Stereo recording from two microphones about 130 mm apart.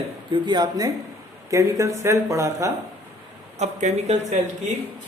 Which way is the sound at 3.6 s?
60° right (ahead or behind).